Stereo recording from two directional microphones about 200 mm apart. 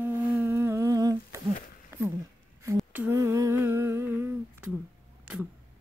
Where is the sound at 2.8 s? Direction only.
10° right (ahead or behind).